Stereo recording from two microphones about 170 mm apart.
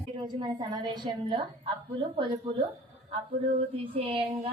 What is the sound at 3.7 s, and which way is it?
Speech, 35° right (ahead or behind).